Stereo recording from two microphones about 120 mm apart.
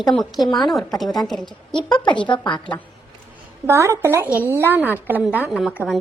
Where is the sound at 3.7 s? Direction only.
25° right (ahead or behind).